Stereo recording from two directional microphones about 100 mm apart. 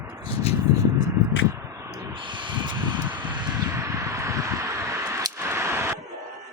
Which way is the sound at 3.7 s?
30° right (ahead or behind).